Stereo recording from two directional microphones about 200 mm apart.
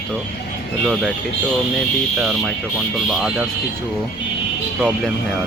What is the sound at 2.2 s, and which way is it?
Speech, 5° right (ahead or behind).